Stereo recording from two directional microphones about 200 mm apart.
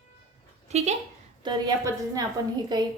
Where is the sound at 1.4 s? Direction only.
20° right (ahead or behind).